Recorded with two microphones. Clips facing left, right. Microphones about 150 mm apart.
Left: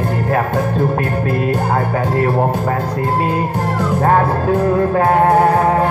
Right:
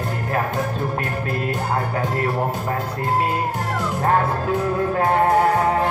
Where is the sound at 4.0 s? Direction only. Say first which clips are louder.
Left 5 dB; 50° left (ahead or behind).